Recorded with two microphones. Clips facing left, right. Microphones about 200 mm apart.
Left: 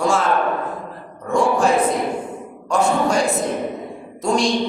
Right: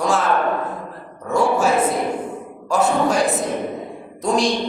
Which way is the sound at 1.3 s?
5° right (ahead or behind).